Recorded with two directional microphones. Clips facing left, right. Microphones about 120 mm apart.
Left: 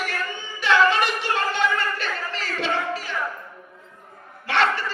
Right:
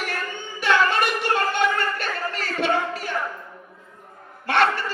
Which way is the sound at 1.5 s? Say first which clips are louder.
Right 1 dB; 50° right (ahead or behind).